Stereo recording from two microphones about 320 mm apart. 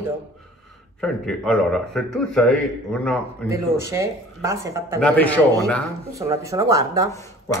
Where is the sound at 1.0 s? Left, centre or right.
Centre.